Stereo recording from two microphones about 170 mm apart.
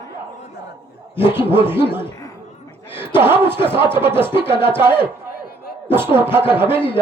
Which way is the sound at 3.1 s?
15° right (ahead or behind).